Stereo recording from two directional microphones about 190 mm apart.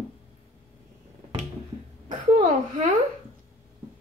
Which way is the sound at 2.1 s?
40° right (ahead or behind).